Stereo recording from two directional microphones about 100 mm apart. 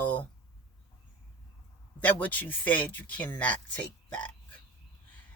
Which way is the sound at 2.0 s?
15° left (ahead or behind).